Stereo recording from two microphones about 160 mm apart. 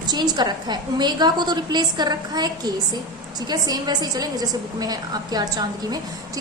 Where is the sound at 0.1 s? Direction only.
25° right (ahead or behind).